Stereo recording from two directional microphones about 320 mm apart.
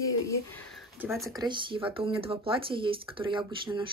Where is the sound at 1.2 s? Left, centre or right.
Centre.